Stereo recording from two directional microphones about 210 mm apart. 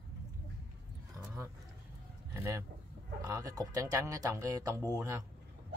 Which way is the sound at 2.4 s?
15° right (ahead or behind).